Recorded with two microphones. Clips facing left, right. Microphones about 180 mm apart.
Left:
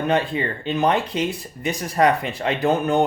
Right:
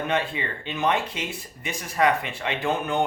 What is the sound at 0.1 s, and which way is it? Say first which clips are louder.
Speech: left 5 dB; 40° left (ahead or behind).